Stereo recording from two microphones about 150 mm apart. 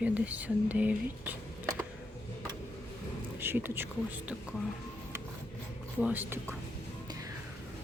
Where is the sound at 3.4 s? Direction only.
15° right (ahead or behind).